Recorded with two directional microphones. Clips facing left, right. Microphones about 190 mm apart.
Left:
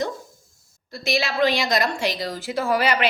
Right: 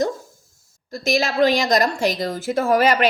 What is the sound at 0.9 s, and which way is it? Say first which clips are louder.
A woman's voice: right 4 dB; 45° right (ahead or behind).